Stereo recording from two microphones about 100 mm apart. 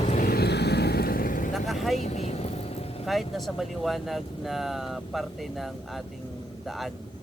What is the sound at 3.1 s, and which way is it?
Speech, centre (ahead or behind).